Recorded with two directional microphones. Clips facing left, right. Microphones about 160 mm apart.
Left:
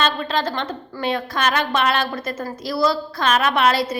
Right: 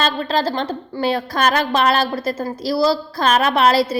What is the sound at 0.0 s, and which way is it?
A woman's voice, 35° right (ahead or behind).